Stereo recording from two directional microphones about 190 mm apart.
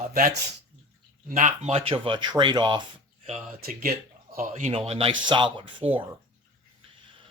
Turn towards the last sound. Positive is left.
turn(degrees=-35)  # may be behind; listen again after turning